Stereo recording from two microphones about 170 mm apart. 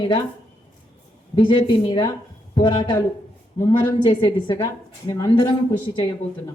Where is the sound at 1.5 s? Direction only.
25° left (ahead or behind).